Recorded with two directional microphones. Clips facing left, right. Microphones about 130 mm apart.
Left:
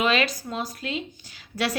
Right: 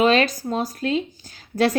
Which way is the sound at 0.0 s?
40° right (ahead or behind).